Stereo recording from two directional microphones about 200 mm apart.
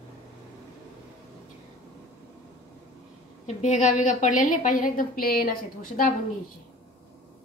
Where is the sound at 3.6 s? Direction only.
35° left (ahead or behind).